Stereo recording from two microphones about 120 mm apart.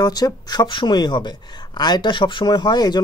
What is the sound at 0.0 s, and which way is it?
Speech, 35° left (ahead or behind).